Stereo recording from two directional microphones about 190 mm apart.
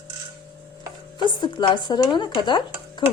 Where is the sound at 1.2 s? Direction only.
25° left (ahead or behind).